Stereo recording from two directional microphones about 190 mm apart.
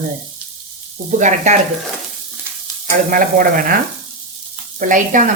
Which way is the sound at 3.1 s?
45° right (ahead or behind).